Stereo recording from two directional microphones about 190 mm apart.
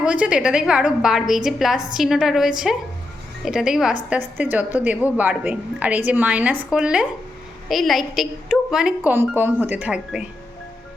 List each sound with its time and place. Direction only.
0.0 s a woman's voice: 5° right (ahead or behind)